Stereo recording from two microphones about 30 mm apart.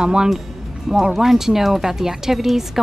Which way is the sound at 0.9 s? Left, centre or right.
Centre.